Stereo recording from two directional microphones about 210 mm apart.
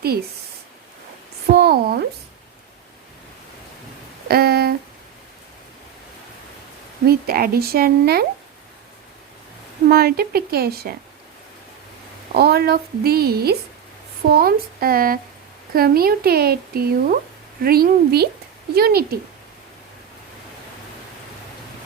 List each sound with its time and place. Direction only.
1.5 s speech: 50° right (ahead or behind)
4.3 s a sound: 50° right (ahead or behind)
7.1 s speech: 45° right (ahead or behind)
9.9 s speech: 45° right (ahead or behind)
12.3 s speech: 50° right (ahead or behind)